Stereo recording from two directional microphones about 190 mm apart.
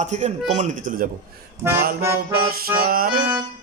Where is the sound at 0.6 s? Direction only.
40° right (ahead or behind).